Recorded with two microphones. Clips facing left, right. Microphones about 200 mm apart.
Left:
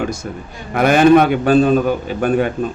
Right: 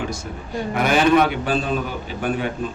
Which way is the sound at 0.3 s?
55° left (ahead or behind).